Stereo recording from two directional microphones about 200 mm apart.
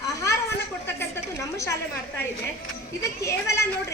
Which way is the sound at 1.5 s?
15° left (ahead or behind).